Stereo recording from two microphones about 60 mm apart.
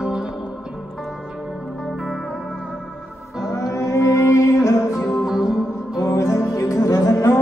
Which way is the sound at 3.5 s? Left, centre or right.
Left.